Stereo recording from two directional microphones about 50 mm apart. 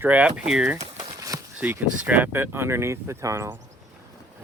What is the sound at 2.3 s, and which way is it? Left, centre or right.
Speech, right.